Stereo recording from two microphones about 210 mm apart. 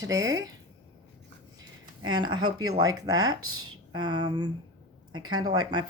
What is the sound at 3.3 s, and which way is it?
Speech, 90° right.